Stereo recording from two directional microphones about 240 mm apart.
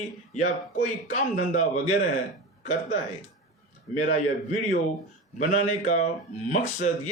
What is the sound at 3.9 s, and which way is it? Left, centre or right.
Speech, left.